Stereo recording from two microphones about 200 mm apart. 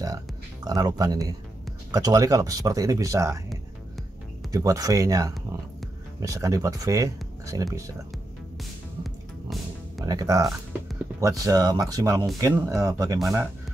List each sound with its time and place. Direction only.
0.7 s speech: 20° right (ahead or behind)
4.5 s speech: 15° right (ahead or behind)
9.0 s music: centre (ahead or behind)
10.0 s speech: 20° right (ahead or behind)